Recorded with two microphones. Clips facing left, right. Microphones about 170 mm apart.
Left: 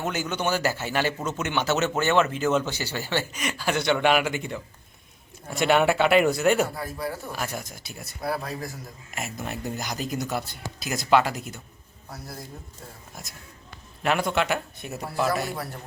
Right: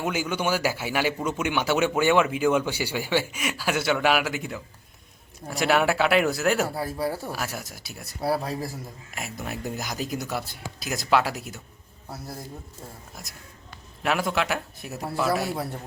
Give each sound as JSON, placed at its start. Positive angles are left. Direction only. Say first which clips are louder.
{"t": 0.0, "sound": "a man's voice", "louder": "right 1 dB", "side_deg": -10}
{"t": 6.7, "sound": "speech", "louder": "right 4 dB", "side_deg": -30}
{"t": 7.3, "sound": "speech", "louder": "left 1 dB", "side_deg": -5}
{"t": 8.2, "sound": "speech", "louder": "right 3 dB", "side_deg": -30}
{"t": 9.1, "sound": "speech", "louder": "left 1 dB", "side_deg": 0}
{"t": 14.0, "sound": "speech", "louder": "left 1 dB", "side_deg": 0}